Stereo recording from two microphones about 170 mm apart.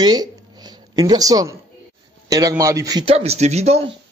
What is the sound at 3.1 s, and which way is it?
Speech, 35° right (ahead or behind).